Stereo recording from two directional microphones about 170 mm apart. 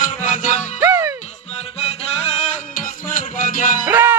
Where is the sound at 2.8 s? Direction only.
50° left (ahead or behind).